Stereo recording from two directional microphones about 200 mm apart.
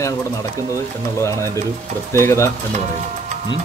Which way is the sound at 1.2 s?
15° left (ahead or behind).